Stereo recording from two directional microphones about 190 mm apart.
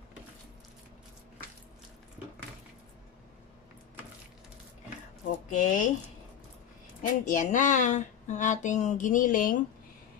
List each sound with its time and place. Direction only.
5.5 s speech: 45° left (ahead or behind)
7.0 s speech: 45° left (ahead or behind)